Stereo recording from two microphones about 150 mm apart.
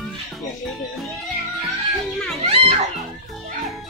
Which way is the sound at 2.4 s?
45° right (ahead or behind).